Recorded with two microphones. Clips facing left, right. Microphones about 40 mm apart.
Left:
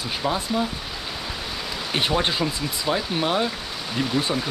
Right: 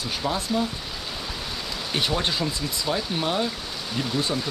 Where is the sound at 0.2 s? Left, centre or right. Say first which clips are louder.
Left 1 dB; centre.